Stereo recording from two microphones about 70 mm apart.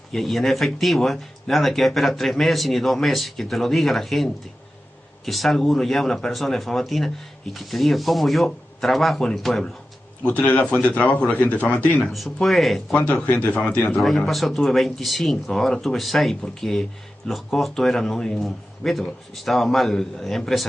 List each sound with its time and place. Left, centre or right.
0.1 s speech: centre
10.2 s a man's voice: centre
11.7 s a man's voice: left
12.0 s speech: centre
12.9 s a man's voice: centre
13.9 s speech: centre